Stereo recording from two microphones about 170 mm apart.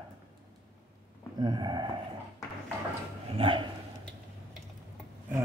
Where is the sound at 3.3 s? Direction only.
30° right (ahead or behind).